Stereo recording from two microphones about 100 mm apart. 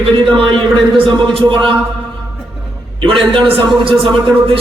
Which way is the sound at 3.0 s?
60° right (ahead or behind).